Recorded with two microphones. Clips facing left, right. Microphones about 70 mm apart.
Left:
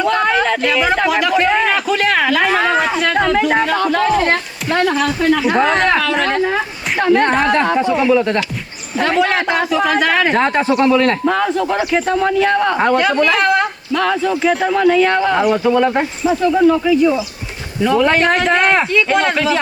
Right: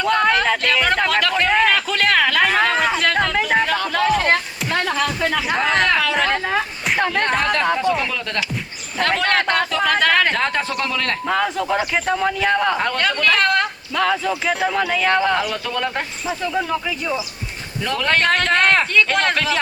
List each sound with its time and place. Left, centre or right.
0.0 s speech: centre
4.7 s speech: centre
5.3 s a man's voice: centre
7.1 s speech: left
8.1 s speech: left
9.0 s speech: centre
10.3 s speech: left
11.3 s a man's voice: centre
13.0 s a man's voice: centre
15.5 s speech: centre